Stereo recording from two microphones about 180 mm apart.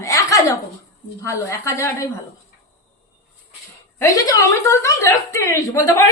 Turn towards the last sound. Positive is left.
turn(degrees=15)  # may be behind; listen again after turning